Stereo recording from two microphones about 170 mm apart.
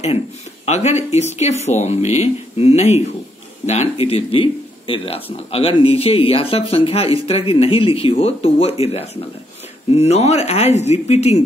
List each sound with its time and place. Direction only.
0.7 s speech: 40° left (ahead or behind)